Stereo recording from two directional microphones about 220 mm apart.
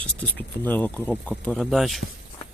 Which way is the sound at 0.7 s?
5° left (ahead or behind).